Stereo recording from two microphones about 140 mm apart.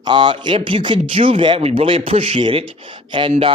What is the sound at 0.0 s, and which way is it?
A man's voice, 35° right (ahead or behind).